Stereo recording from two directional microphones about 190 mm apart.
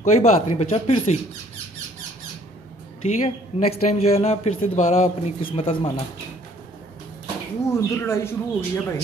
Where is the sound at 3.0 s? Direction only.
35° left (ahead or behind).